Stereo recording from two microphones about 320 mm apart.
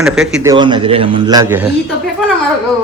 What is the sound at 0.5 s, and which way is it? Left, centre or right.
Speech, centre.